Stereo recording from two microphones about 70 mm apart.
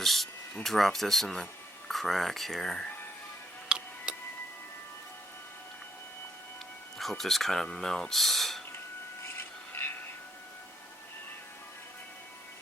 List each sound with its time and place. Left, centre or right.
0.0 s speech: centre
3.7 s tick-tock: centre
7.0 s speech: centre
9.2 s a sound: left